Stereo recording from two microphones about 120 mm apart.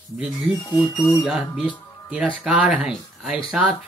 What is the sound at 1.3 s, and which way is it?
Speech, 5° right (ahead or behind).